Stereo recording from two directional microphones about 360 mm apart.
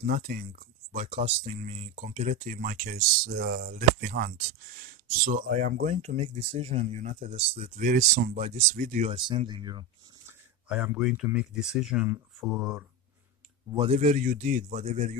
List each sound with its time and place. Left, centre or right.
0.0 s speech: right; by 12.8 s centre
13.7 s speech: centre